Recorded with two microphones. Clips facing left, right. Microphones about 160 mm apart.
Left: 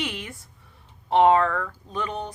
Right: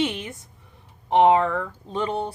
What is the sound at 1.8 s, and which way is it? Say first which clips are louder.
Speech: right 4 dB; 30° right (ahead or behind).